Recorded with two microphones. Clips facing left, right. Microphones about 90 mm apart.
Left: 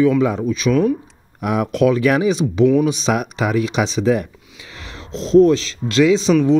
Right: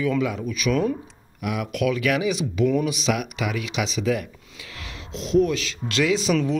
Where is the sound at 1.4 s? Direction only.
40° left (ahead or behind).